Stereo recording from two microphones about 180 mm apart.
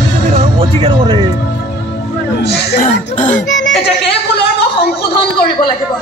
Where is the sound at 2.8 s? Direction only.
45° left (ahead or behind).